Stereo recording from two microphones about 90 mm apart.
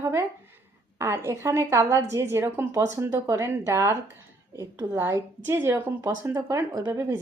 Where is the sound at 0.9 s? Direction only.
30° right (ahead or behind).